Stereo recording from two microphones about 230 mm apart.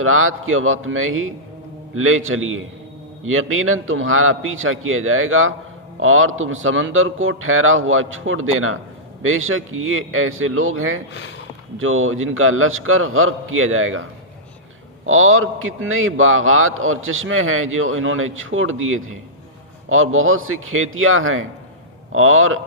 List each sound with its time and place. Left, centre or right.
0.0 s a man's voice: right
11.1 s speech: left
11.8 s a man's voice: right
15.0 s a man's voice: right